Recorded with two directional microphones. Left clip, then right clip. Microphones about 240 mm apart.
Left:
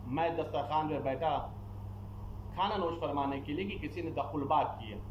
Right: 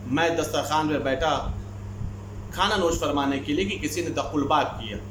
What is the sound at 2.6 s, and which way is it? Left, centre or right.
Speech, right.